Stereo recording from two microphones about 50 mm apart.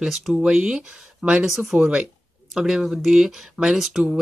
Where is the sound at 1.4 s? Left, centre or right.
Centre.